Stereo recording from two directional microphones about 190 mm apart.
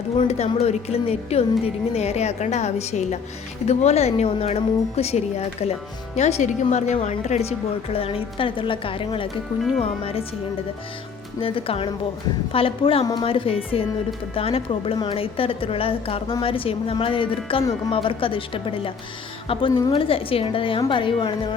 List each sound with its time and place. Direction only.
0.2 s a woman's voice: 35° left (ahead or behind)
11.3 s speech: 30° left (ahead or behind)